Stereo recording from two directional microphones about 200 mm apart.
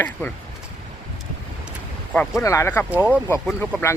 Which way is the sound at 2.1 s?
5° left (ahead or behind).